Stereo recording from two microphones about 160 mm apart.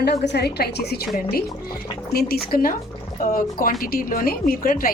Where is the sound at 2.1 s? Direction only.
70° left (ahead or behind).